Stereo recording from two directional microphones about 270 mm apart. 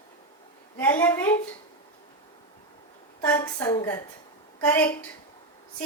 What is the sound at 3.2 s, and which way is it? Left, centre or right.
A woman's voice, centre.